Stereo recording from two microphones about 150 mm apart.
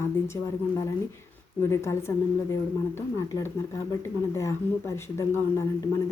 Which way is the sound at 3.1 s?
20° left (ahead or behind).